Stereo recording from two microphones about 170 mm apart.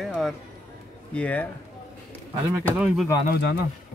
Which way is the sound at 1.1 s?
10° left (ahead or behind).